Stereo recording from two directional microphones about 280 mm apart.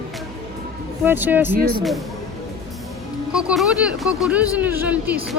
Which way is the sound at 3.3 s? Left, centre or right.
Centre.